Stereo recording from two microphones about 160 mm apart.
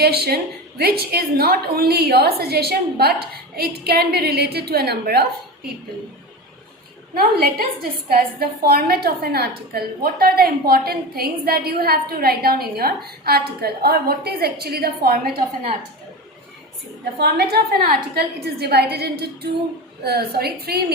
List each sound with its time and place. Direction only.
0.0 s a woman's voice: 80° right
7.1 s a woman's voice: 70° right (ahead or behind)
17.2 s a woman's voice: 90° right